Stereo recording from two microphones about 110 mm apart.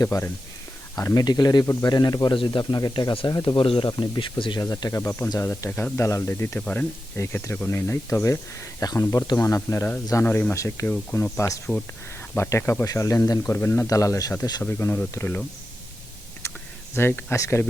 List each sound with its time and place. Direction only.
0.0 s speech: 30° left (ahead or behind); by 4.6 s 50° left (ahead or behind)
4.6 s speech: 30° left (ahead or behind)
6.6 s speech: 10° left (ahead or behind)
7.2 s speech: 25° left (ahead or behind)
14.6 s speech: 20° left (ahead or behind)
16.9 s speech: 20° left (ahead or behind)